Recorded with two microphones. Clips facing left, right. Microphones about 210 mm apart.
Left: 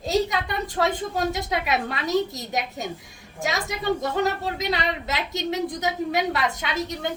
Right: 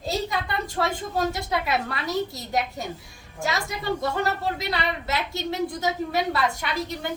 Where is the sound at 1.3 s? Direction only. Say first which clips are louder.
Left 1 dB; 20° left (ahead or behind).